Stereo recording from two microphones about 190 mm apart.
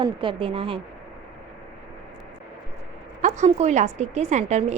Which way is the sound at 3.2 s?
40° right (ahead or behind).